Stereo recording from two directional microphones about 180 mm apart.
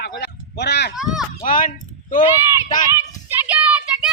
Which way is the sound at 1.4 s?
50° left (ahead or behind).